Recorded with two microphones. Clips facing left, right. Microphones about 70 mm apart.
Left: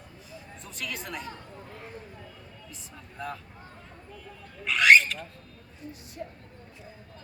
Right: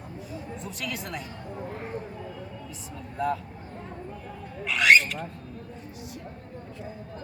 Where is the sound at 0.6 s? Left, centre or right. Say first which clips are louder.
Even; centre.